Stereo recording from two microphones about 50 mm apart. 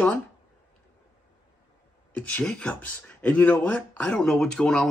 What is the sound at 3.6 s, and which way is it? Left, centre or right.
Speech, left.